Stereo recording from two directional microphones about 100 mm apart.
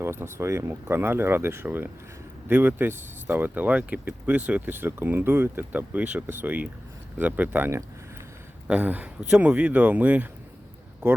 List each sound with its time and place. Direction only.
0.0 s speech: 25° right (ahead or behind)